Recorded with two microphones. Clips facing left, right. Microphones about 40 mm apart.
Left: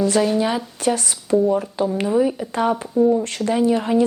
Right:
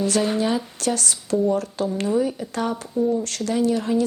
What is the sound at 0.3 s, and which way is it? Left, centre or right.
Speech, centre.